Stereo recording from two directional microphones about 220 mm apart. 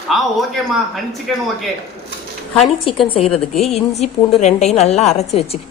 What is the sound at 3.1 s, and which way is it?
A woman's voice, 25° left (ahead or behind).